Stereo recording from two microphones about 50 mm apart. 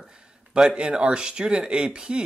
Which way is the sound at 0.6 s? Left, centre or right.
Centre.